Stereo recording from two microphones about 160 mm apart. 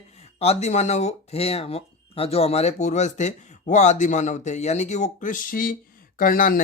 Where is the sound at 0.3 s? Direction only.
40° left (ahead or behind).